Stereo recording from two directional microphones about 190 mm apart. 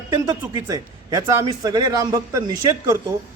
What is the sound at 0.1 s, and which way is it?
A man's voice, 20° right (ahead or behind).